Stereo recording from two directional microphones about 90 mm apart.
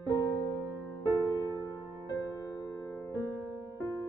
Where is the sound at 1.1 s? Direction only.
40° left (ahead or behind).